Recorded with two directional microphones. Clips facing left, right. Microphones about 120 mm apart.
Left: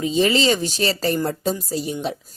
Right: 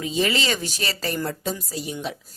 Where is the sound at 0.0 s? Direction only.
30° left (ahead or behind).